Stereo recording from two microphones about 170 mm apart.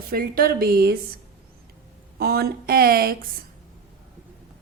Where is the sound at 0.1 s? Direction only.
60° right (ahead or behind).